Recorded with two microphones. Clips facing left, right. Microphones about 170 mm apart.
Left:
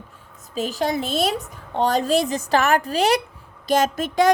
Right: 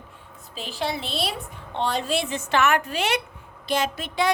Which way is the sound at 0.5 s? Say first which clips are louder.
Left 6 dB; 45° left (ahead or behind).